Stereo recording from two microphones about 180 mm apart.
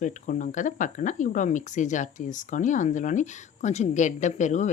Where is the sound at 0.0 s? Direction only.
45° left (ahead or behind).